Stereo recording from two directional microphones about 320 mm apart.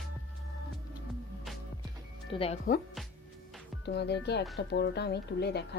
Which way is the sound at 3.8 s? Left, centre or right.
Left.